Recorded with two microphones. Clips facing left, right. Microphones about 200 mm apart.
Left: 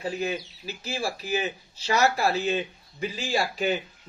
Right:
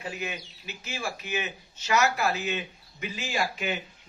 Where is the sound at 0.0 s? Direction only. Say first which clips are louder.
Left 6 dB; 35° left (ahead or behind).